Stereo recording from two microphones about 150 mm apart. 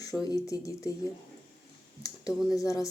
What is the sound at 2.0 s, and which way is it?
Speech, 25° left (ahead or behind).